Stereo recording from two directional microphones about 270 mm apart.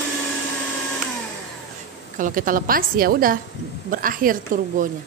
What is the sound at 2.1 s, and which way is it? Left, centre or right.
A woman's voice, right.